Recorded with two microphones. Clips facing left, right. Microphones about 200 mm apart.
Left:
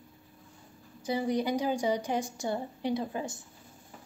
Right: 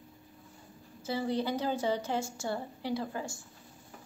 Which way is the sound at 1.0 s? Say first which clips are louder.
Left 3 dB; 15° left (ahead or behind).